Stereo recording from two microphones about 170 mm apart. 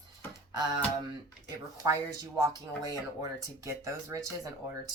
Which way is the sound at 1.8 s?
20° right (ahead or behind).